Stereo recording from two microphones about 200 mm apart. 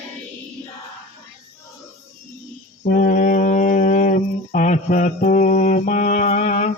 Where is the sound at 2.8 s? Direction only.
40° left (ahead or behind).